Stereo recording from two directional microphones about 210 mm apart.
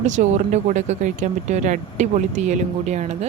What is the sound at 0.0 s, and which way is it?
Speech, 35° right (ahead or behind).